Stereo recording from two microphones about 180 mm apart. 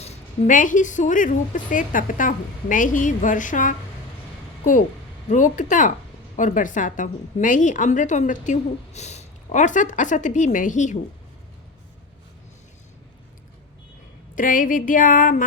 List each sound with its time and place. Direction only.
0.0 s a woman's voice: 40° left (ahead or behind)
5.3 s a woman's voice: 45° left (ahead or behind)
14.3 s a woman's voice: 50° left (ahead or behind)